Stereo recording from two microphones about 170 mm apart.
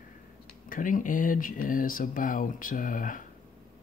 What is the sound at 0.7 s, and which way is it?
Speech, 50° left (ahead or behind).